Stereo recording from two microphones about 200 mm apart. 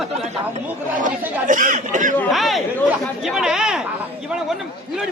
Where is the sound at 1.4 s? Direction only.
40° right (ahead or behind).